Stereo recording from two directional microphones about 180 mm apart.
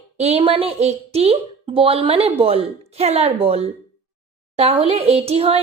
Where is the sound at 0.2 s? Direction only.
35° right (ahead or behind).